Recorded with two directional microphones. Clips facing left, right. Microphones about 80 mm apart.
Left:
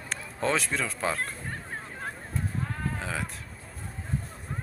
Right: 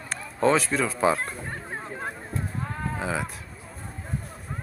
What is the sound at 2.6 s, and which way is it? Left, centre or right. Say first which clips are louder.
Livestock: right 3 dB; centre.